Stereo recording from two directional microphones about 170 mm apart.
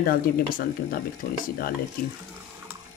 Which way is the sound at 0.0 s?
60° left (ahead or behind).